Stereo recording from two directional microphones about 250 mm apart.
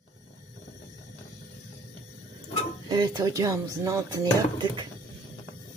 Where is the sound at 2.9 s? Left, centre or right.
Centre.